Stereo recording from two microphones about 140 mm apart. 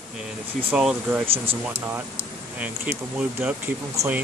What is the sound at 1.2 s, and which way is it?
Speech, 40° right (ahead or behind).